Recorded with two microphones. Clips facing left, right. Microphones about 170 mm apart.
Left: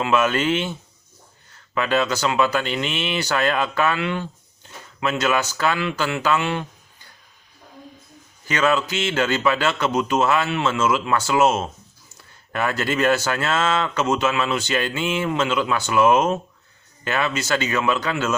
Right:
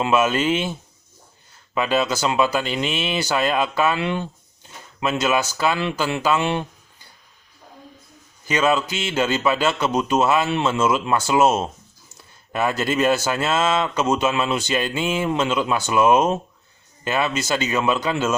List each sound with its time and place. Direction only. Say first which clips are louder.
0.3 s speech: right 1 dB; 10° right (ahead or behind)
8.4 s speech: right 1 dB; 15° right (ahead or behind)
12.5 s speech: right 1 dB; 15° right (ahead or behind)